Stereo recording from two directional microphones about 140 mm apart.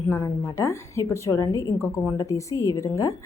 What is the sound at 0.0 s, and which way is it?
A woman's voice, 20° left (ahead or behind).